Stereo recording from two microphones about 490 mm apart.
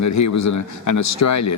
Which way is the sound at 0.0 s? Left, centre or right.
Left.